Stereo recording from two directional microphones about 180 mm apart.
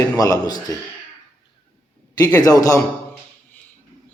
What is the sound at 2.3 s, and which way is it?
Speech, 20° left (ahead or behind).